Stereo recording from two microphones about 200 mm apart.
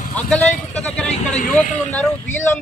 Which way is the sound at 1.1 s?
35° left (ahead or behind).